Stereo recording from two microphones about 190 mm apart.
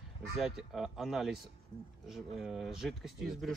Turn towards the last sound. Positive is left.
turn(degrees=0)  # may be behind; listen again after turning